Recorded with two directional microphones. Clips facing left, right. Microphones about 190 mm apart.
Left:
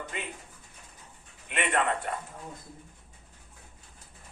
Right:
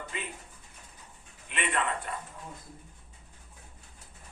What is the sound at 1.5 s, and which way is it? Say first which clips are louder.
Speech: left 4 dB; 55° left (ahead or behind).